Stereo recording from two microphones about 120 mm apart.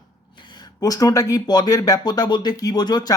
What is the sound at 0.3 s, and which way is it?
Speech, 40° left (ahead or behind).